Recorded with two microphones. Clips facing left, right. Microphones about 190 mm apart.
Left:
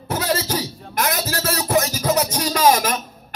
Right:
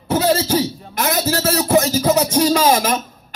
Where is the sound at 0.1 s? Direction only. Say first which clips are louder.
Right 6 dB; 30° right (ahead or behind).